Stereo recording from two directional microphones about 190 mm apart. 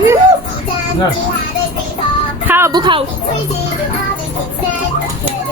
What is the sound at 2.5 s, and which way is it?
Speech, 15° right (ahead or behind).